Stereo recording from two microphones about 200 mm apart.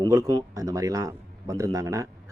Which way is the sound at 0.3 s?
15° right (ahead or behind).